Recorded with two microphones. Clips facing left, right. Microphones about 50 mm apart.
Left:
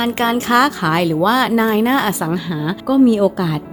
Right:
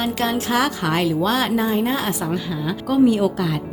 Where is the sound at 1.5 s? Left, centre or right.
Left.